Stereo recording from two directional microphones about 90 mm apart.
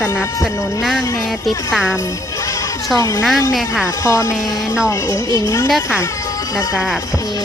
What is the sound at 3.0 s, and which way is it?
Speech, 35° left (ahead or behind).